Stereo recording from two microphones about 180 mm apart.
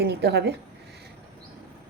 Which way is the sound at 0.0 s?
65° right (ahead or behind).